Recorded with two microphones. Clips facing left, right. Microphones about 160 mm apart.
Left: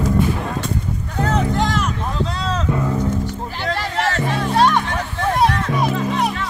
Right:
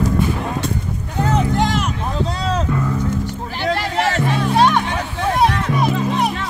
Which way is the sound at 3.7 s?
15° right (ahead or behind).